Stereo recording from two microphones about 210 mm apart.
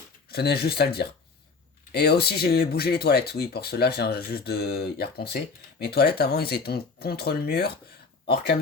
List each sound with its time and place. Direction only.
0.3 s speech: 50° left (ahead or behind)